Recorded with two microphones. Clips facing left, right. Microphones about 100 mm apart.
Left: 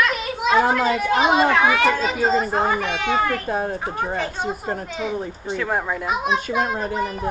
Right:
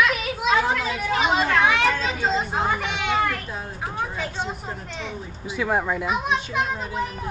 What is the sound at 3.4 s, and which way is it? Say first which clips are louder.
Speech: left 8 dB; 55° left (ahead or behind).